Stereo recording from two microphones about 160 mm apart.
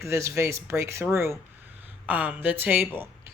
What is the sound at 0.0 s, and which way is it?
Speech, 20° right (ahead or behind).